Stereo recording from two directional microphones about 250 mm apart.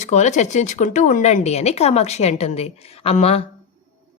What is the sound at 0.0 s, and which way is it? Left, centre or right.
Speech, left.